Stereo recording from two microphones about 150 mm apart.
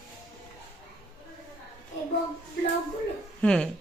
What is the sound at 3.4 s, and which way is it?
Speech, 5° left (ahead or behind).